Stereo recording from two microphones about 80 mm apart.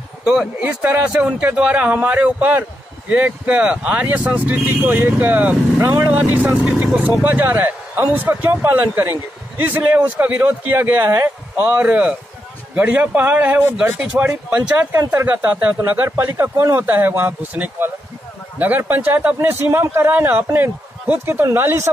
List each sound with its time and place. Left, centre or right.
0.2 s speech: centre
0.6 s speech: right
6.8 s speech: centre
11.5 s speech: centre
14.9 s speech: right